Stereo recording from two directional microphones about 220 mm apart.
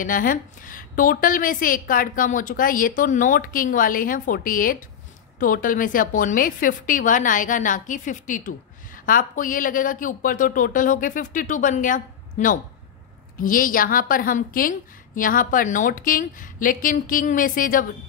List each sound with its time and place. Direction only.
0.0 s a woman's voice: 40° left (ahead or behind)